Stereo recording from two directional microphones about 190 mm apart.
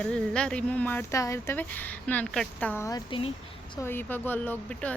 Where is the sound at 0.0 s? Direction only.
5° left (ahead or behind); by 3.3 s 25° left (ahead or behind).